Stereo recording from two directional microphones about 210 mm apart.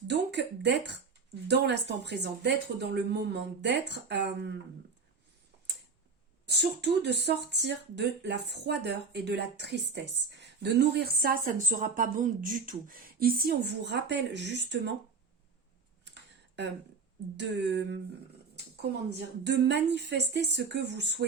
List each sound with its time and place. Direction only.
0.1 s speech: 55° right (ahead or behind)
6.5 s speech: 55° right (ahead or behind)
16.0 s a sound: 55° right (ahead or behind)
17.3 s speech: 55° right (ahead or behind)
19.5 s speech: 55° right (ahead or behind)